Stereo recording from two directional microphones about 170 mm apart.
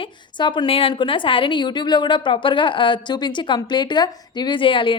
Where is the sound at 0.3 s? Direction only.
30° left (ahead or behind).